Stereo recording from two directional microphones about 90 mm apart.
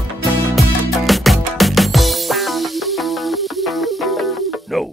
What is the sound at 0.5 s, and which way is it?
Music, centre (ahead or behind).